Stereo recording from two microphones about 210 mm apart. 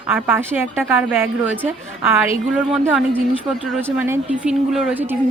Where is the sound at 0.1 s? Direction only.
10° right (ahead or behind).